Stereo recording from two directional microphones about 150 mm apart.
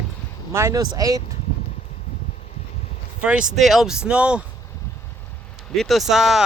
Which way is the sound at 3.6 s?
Centre (ahead or behind).